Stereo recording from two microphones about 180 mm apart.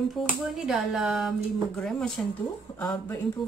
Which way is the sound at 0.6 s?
Centre (ahead or behind).